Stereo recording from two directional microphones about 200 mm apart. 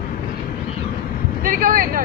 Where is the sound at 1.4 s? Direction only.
45° right (ahead or behind).